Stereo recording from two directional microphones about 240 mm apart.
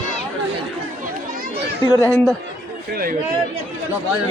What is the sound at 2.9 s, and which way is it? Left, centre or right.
Speech, right.